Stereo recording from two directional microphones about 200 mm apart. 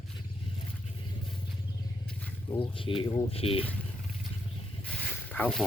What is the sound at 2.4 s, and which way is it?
Speech, 25° left (ahead or behind).